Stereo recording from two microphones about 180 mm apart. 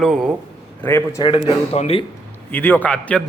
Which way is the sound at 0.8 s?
10° left (ahead or behind).